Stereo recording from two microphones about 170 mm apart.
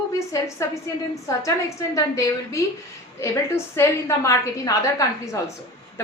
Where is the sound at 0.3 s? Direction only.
15° left (ahead or behind).